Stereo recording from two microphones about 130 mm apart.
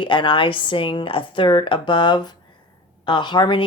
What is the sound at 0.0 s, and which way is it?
A woman's voice, 40° left (ahead or behind).